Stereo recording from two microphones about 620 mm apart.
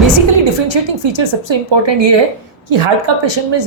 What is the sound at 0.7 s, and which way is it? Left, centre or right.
Speech, right.